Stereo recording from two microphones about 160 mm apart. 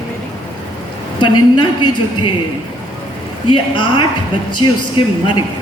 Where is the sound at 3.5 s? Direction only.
30° left (ahead or behind).